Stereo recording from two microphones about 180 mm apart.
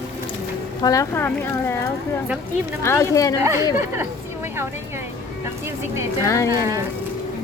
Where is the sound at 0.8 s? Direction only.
20° left (ahead or behind).